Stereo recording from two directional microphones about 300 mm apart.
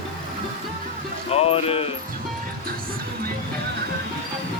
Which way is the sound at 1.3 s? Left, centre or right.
Centre.